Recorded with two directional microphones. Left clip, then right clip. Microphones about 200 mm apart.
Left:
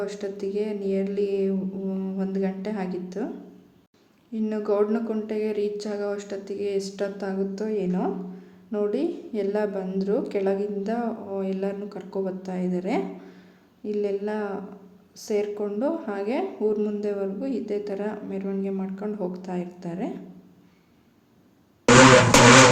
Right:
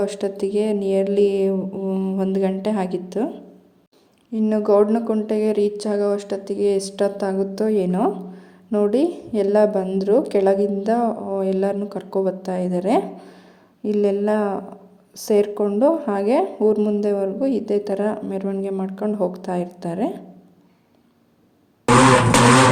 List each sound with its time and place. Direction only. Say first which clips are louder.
0.0 s speech: right 7 dB; 35° right (ahead or behind)
4.3 s speech: right 8 dB; 30° right (ahead or behind)